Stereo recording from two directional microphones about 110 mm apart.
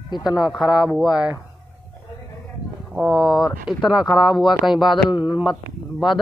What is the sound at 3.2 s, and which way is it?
Speech, 40° left (ahead or behind).